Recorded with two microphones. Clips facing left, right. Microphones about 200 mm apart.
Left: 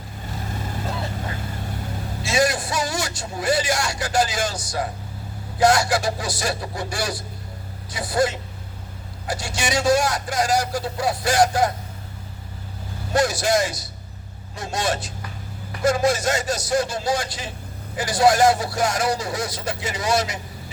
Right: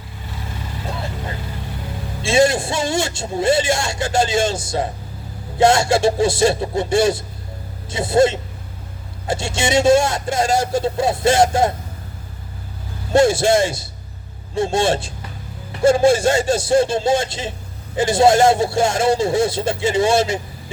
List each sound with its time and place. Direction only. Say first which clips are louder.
2.2 s a man's voice: right 6 dB; 25° right (ahead or behind)
13.1 s a man's voice: right 6 dB; 25° right (ahead or behind)